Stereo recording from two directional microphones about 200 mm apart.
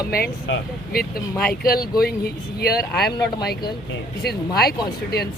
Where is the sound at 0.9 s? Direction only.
50° left (ahead or behind).